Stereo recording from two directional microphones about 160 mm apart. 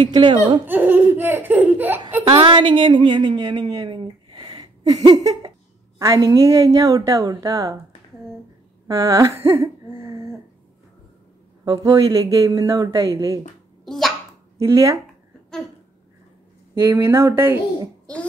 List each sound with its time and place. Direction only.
0.0 s speech: 30° right (ahead or behind)
0.7 s speech: 10° right (ahead or behind)
2.2 s a woman's voice: 35° right (ahead or behind)
8.8 s a sound: 20° right (ahead or behind)
11.6 s a woman's voice: 20° right (ahead or behind)
13.8 s a sound: centre (ahead or behind)
14.6 s a woman's voice: 20° right (ahead or behind)
16.8 s speech: 15° right (ahead or behind)
18.1 s a sound: 5° left (ahead or behind)